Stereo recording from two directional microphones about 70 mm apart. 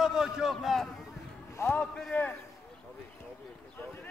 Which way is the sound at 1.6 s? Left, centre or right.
Left.